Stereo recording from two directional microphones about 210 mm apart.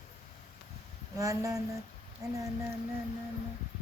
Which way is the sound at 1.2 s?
15° right (ahead or behind).